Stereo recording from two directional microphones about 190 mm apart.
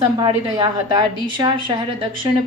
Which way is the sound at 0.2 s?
25° right (ahead or behind).